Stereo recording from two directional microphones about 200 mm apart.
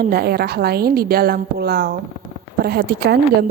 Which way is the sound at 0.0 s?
50° right (ahead or behind).